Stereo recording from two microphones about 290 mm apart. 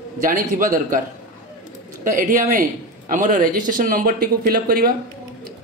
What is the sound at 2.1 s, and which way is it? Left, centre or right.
Speech, right.